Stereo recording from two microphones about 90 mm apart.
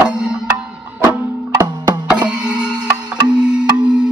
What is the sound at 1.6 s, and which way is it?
Music, 50° right (ahead or behind).